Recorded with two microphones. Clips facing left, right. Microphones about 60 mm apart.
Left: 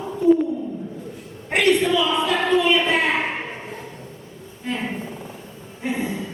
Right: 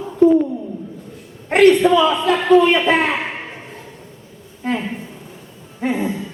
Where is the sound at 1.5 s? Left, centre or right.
Right.